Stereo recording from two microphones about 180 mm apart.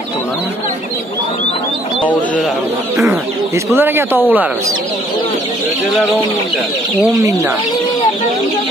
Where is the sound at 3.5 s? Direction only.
15° right (ahead or behind).